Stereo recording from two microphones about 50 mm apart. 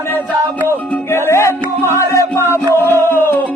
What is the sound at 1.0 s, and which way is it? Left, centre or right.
Music, left.